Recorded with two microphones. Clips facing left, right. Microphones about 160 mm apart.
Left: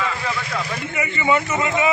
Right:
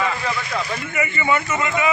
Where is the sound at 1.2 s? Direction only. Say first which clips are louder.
Left 3 dB; 20° left (ahead or behind).